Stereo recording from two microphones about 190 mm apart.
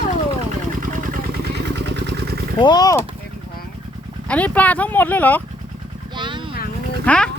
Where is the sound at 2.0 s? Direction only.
65° right (ahead or behind).